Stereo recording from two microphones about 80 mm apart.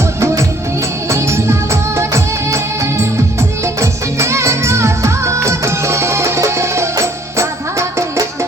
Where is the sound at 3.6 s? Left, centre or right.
Right.